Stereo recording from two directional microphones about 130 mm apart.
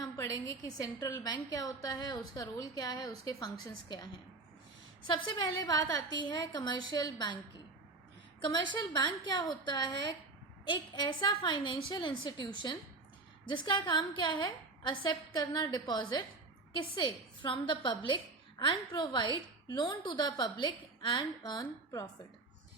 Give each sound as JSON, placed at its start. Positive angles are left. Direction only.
{"t": 0.0, "sound": "a woman's voice", "side_deg": 30}
{"t": 5.1, "sound": "a woman's voice", "side_deg": 30}
{"t": 8.4, "sound": "a woman's voice", "side_deg": 35}
{"t": 13.5, "sound": "a woman's voice", "side_deg": 35}